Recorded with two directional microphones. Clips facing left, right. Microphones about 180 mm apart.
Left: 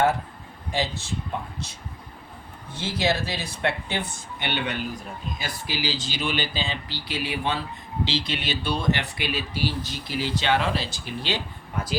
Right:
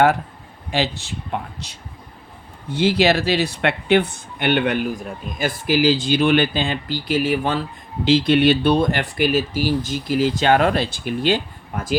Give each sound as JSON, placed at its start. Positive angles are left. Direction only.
{"t": 0.7, "sound": "speech", "side_deg": -70}
{"t": 2.7, "sound": "speech", "side_deg": -70}